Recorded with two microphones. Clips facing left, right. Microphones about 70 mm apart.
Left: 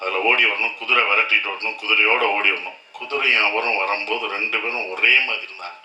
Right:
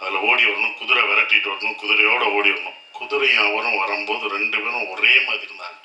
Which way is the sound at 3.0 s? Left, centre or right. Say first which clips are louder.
Right 1 dB; left.